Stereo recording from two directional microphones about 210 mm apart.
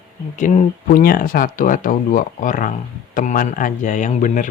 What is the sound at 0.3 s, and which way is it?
Speech, 35° left (ahead or behind).